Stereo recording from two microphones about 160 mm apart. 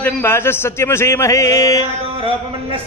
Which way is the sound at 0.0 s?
15° left (ahead or behind).